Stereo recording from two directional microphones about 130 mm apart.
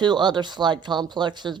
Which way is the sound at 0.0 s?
35° right (ahead or behind).